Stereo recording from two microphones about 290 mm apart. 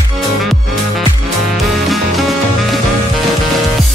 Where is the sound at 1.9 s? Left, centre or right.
Centre.